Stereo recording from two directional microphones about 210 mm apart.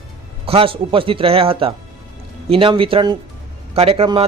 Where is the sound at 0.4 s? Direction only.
25° right (ahead or behind).